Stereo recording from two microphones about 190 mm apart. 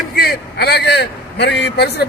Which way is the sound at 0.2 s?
55° left (ahead or behind).